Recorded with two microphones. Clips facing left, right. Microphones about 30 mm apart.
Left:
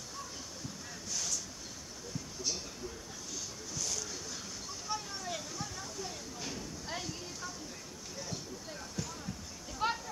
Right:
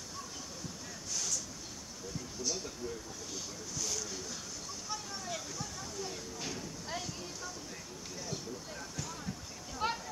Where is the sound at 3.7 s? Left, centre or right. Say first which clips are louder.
Even; centre.